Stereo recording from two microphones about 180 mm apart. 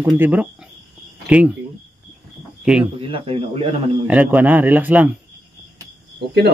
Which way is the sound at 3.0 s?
30° right (ahead or behind).